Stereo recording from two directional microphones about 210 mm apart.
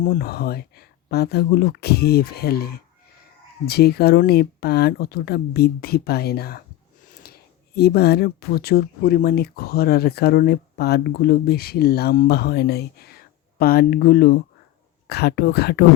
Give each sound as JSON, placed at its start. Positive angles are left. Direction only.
{"t": 0.0, "sound": "speech", "side_deg": 45}
{"t": 7.8, "sound": "speech", "side_deg": 50}